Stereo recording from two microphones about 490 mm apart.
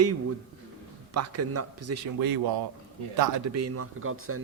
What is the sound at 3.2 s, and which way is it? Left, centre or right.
A man's voice, right.